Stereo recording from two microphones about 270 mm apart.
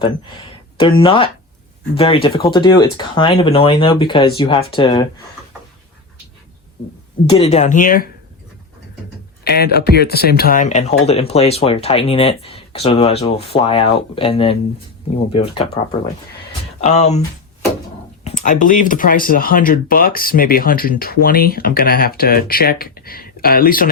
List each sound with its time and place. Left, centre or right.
0.8 s speech: centre
7.3 s speech: left
9.4 s speech: left
16.8 s speech: left
18.3 s speech: left